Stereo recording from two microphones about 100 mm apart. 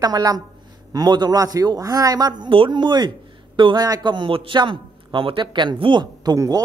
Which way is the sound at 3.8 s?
45° right (ahead or behind).